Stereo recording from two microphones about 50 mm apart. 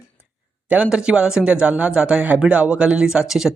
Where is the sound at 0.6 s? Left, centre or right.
Right.